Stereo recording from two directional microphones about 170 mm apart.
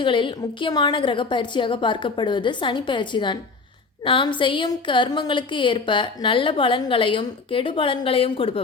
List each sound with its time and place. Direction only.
0.0 s a woman's voice: 30° left (ahead or behind)